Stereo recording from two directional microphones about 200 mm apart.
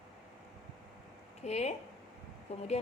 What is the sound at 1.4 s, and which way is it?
A woman's voice, 35° left (ahead or behind).